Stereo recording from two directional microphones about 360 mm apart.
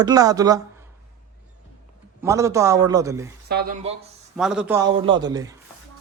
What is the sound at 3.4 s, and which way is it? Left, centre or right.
Speech, right.